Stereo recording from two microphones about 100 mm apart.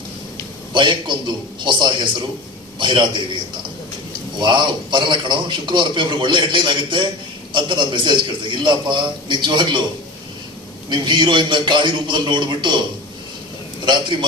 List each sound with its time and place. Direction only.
0.7 s a sound: 50° right (ahead or behind)
1.6 s a man's voice: 50° right (ahead or behind)
10.8 s a man's voice: 50° right (ahead or behind)
13.8 s a man's voice: 50° right (ahead or behind)